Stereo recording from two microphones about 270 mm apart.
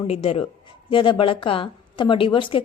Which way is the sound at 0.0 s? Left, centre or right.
Left.